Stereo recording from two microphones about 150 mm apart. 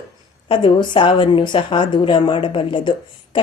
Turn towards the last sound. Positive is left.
turn(degrees=35)  # may be behind; listen again after turning